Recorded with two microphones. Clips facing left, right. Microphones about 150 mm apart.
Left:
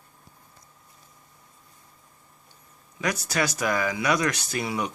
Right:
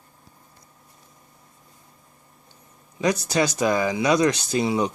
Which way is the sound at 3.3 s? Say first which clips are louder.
Right 3 dB; 20° right (ahead or behind).